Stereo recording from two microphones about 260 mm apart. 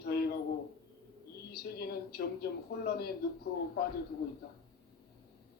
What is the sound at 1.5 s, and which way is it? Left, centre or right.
Speech, left.